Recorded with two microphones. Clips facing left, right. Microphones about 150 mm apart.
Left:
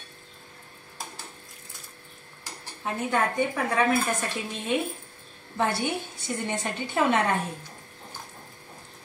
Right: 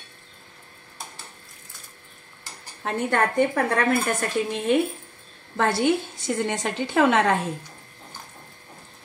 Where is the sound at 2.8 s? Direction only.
70° right (ahead or behind).